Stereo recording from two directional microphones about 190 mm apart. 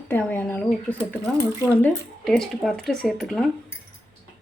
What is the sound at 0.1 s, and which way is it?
Speech, 10° left (ahead or behind).